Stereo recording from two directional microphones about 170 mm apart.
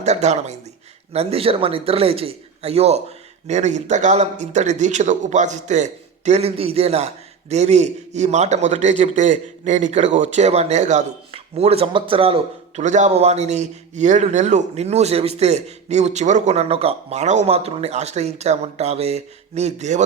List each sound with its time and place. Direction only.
0.0 s a man's voice: 40° right (ahead or behind)